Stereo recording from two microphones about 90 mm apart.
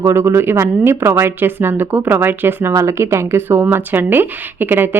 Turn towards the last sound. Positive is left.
turn(degrees=-25)  # may be behind; listen again after turning